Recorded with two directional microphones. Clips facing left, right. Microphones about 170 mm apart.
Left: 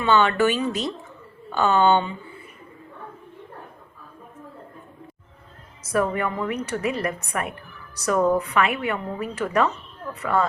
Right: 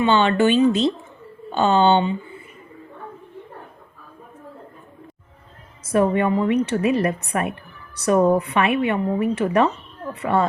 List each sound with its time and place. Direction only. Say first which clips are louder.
0.0 s a woman's voice: right 2 dB; 25° right (ahead or behind)
5.8 s a woman's voice: right 5 dB; 25° right (ahead or behind)